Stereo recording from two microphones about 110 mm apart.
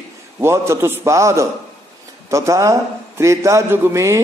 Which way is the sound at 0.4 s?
25° right (ahead or behind).